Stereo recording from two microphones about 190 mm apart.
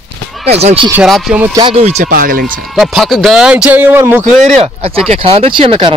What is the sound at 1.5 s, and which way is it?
Speech, 25° right (ahead or behind).